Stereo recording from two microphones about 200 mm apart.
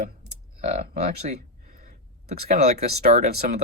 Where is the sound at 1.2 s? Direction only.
40° right (ahead or behind).